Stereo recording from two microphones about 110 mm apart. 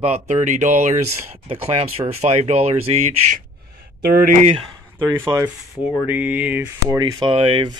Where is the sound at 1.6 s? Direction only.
65° right (ahead or behind).